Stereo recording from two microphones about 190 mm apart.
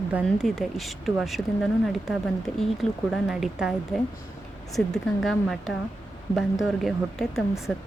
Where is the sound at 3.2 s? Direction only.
5° right (ahead or behind).